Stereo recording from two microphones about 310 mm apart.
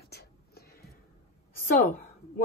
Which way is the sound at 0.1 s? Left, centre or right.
Left.